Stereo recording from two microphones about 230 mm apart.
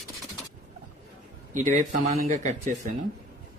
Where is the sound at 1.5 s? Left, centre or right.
Right.